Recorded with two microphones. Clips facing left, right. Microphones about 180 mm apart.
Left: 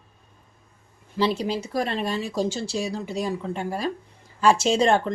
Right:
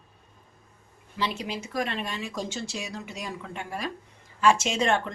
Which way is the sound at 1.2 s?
35° left (ahead or behind).